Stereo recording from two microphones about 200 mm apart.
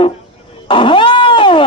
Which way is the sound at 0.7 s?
25° left (ahead or behind).